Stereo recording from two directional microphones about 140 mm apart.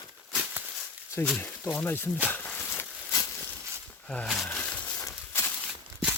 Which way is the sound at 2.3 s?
10° left (ahead or behind).